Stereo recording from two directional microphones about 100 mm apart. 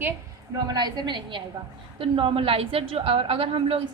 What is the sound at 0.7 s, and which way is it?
Speech, 45° right (ahead or behind).